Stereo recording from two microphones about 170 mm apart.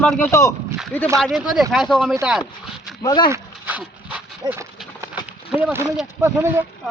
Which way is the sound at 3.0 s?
25° left (ahead or behind).